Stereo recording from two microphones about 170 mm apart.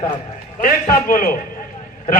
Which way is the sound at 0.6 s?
55° left (ahead or behind).